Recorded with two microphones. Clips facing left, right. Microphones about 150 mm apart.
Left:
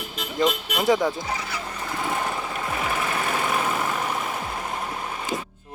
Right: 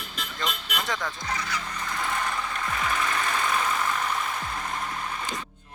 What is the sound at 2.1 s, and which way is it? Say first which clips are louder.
Jackhammer: left 3 dB; 25° left (ahead or behind).